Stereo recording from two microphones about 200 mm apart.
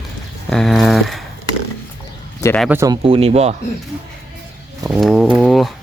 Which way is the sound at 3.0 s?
30° right (ahead or behind).